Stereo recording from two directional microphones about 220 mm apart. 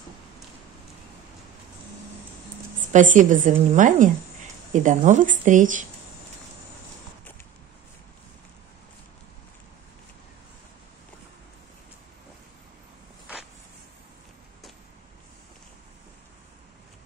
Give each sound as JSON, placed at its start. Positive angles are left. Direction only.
{"t": 2.8, "sound": "a woman's voice", "side_deg": -35}